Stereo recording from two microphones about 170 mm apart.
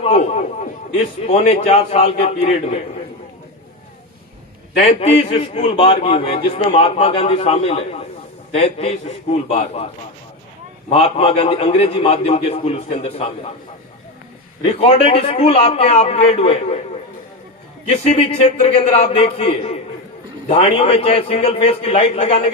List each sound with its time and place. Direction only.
0.0 s a man's voice: 40° left (ahead or behind)
4.8 s a man's voice: 35° left (ahead or behind)
10.8 s a man's voice: 35° left (ahead or behind)
14.6 s a man's voice: 35° left (ahead or behind)
17.8 s a man's voice: 40° left (ahead or behind)